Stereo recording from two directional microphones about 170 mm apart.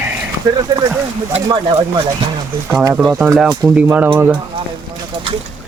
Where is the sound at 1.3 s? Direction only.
30° right (ahead or behind).